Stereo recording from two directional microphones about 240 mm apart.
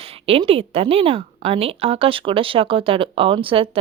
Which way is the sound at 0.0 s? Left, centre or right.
Right.